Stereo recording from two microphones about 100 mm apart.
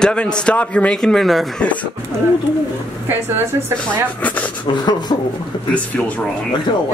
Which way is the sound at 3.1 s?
25° right (ahead or behind).